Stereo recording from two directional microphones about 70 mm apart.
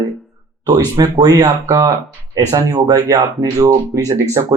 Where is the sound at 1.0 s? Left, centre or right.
Right.